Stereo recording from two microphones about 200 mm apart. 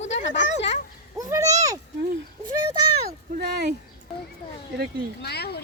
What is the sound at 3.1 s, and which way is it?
Speech, 50° right (ahead or behind).